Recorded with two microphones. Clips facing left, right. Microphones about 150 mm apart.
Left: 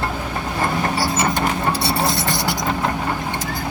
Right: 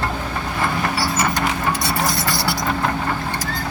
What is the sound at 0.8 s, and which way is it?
Vehicle, 20° left (ahead or behind).